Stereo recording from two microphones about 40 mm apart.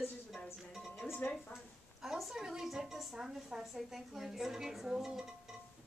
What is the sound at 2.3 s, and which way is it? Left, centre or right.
A woman's voice, centre.